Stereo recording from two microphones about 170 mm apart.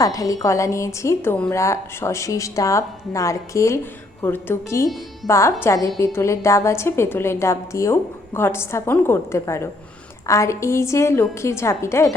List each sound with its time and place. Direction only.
0.0 s a woman's voice: 20° left (ahead or behind)